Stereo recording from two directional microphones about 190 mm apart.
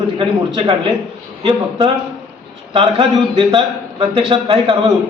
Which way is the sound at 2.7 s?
30° right (ahead or behind).